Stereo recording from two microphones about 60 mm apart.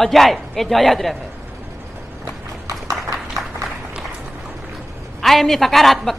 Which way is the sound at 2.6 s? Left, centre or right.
Right.